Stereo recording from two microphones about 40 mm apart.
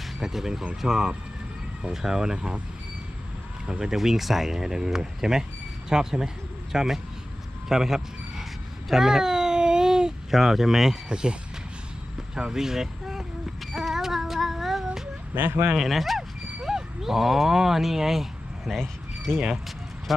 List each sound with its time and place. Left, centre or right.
0.2 s speech: centre
3.7 s speech: centre
3.9 s speech: centre
7.7 s a sound: centre
11.1 s speech: right
13.7 s child singing: centre
15.4 s speech: right
15.8 s speech: centre
16.6 s speech: centre
18.8 s a sound: centre
20.1 s speech: centre